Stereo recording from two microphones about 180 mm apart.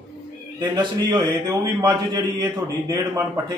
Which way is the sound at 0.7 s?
25° right (ahead or behind).